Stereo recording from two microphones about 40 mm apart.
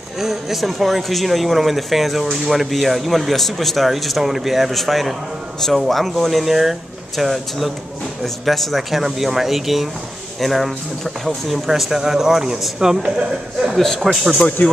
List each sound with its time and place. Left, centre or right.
0.2 s a man's voice: centre
14.6 s speech: left